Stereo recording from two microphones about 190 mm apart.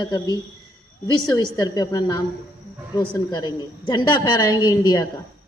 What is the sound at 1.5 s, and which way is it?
Speech, 20° left (ahead or behind).